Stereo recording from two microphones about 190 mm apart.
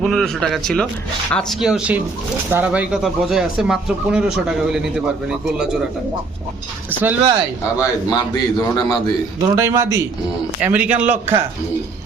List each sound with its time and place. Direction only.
0.0 s speech: centre (ahead or behind)
6.9 s speech: 10° right (ahead or behind)
7.8 s a man's voice: 20° left (ahead or behind)
9.4 s a man's voice: 15° right (ahead or behind)